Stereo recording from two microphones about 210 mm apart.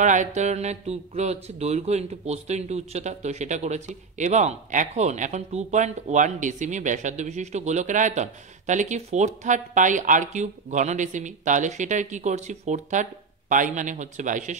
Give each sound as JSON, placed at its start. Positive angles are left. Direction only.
{"t": 0.0, "sound": "speech", "side_deg": -35}